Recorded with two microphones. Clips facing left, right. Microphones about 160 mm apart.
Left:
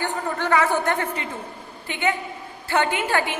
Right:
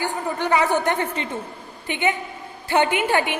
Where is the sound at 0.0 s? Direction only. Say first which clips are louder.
Right 1 dB; 15° right (ahead or behind).